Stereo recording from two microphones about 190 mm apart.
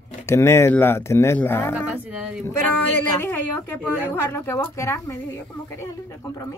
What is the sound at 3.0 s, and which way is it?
A woman's voice, 10° left (ahead or behind).